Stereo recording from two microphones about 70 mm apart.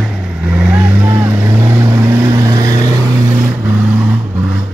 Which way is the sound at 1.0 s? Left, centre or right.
Right.